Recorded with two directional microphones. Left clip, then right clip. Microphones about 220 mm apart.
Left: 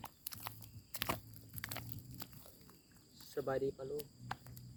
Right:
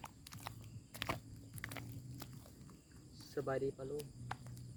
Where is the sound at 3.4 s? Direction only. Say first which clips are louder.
Left 1 dB; 15° left (ahead or behind).